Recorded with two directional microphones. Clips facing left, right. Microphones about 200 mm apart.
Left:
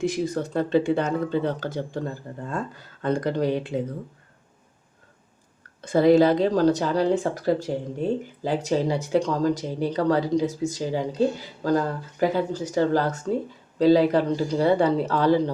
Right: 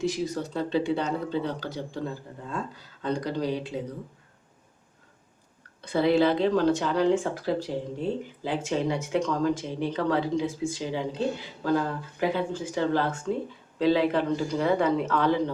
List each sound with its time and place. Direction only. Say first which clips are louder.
0.0 s speech: left 3 dB; 50° left (ahead or behind)
5.8 s speech: left 5 dB; 45° left (ahead or behind)